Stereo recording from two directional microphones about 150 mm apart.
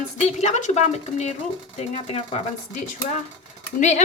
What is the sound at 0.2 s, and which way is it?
Speech, 50° left (ahead or behind).